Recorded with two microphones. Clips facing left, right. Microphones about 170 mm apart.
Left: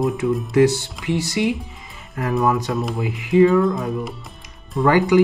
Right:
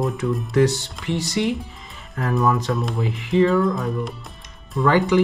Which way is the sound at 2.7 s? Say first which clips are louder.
Left 1 dB; centre (ahead or behind).